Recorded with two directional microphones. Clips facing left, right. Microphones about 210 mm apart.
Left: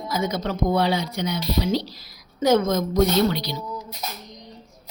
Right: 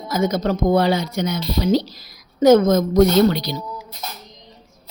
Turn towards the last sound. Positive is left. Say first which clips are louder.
# right 5 dB
turn(degrees=-45)  # may be behind; listen again after turning